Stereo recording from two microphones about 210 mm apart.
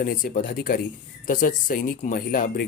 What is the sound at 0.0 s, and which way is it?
Speech, 40° left (ahead or behind).